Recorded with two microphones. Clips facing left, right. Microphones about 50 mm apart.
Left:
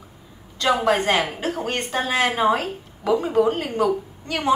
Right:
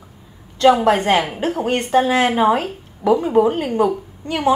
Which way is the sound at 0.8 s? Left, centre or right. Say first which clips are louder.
Right 4 dB; right.